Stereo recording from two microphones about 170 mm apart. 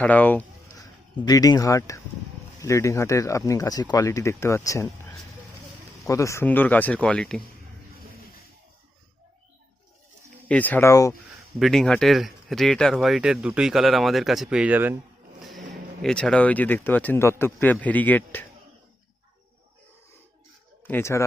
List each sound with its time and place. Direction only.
0.0 s speech: 10° left (ahead or behind)
0.8 s speech: 20° left (ahead or behind); by 7.4 s 5° left (ahead or behind)
10.5 s speech: 10° left (ahead or behind)
11.6 s speech: centre (ahead or behind)
15.4 s speech: centre (ahead or behind)
20.8 s speech: 15° left (ahead or behind)